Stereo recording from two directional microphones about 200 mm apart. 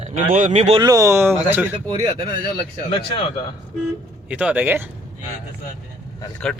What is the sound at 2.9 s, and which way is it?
Speech, 30° left (ahead or behind).